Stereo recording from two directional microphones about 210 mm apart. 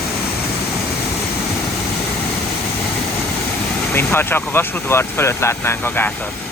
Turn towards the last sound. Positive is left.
turn(degrees=10)  # may be behind; listen again after turning